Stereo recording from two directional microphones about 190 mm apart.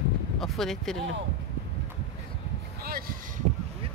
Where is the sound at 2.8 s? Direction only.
50° right (ahead or behind).